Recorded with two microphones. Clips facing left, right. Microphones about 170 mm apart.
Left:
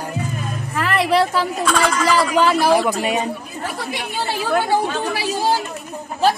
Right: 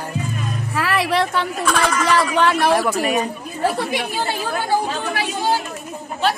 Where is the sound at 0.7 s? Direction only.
5° right (ahead or behind).